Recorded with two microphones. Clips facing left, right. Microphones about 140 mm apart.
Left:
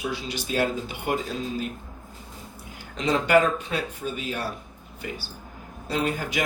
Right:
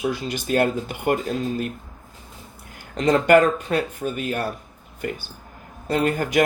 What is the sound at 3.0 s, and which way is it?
Speech, 50° right (ahead or behind).